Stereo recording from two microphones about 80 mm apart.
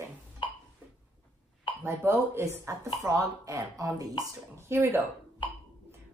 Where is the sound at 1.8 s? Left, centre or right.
Right.